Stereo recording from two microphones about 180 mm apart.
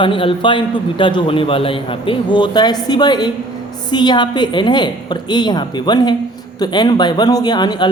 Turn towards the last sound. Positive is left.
turn(degrees=25)  # may be behind; listen again after turning